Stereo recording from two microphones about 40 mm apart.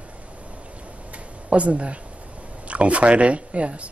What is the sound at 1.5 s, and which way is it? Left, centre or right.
Speech, right.